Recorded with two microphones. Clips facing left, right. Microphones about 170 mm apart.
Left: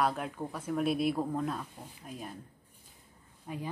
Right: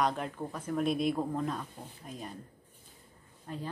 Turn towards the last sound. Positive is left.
turn(degrees=10)  # may be behind; listen again after turning